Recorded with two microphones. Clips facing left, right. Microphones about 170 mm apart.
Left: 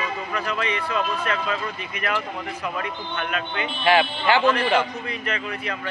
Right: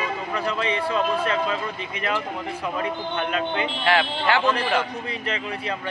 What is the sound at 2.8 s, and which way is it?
Speech, 25° right (ahead or behind).